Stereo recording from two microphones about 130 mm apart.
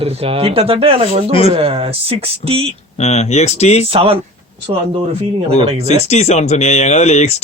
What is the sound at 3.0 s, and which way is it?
Speech, 55° left (ahead or behind).